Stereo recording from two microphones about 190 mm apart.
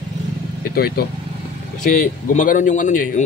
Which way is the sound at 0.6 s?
55° left (ahead or behind).